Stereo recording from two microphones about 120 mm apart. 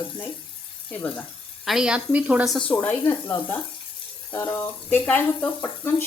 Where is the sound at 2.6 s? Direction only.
10° left (ahead or behind).